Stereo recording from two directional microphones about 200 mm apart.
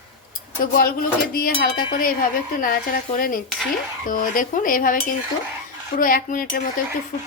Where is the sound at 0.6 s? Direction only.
45° left (ahead or behind).